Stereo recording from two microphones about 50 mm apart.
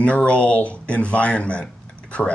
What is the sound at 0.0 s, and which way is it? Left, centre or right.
Speech, left.